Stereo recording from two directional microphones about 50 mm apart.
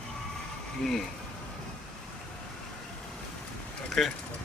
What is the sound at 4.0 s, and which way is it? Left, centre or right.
Speech, centre.